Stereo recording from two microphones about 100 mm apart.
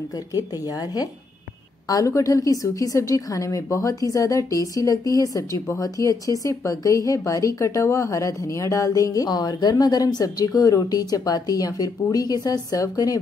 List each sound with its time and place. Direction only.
1.9 s a woman's voice: 35° left (ahead or behind)